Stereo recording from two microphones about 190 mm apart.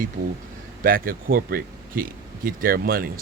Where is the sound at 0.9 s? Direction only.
50° right (ahead or behind).